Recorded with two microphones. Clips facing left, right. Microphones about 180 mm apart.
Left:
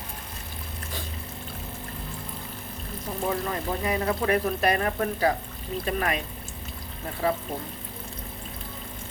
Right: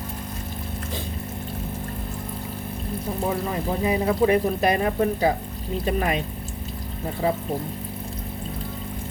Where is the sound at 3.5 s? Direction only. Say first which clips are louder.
Right 4 dB; 15° right (ahead or behind).